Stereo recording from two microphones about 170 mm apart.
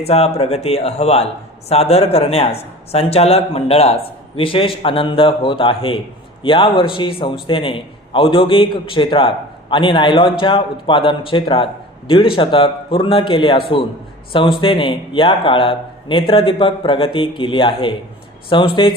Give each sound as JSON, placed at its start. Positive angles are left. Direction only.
{"t": 0.1, "sound": "speech", "side_deg": 35}